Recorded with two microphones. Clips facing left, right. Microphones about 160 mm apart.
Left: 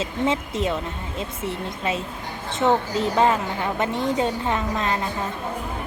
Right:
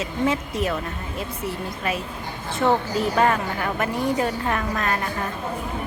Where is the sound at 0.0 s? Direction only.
25° left (ahead or behind).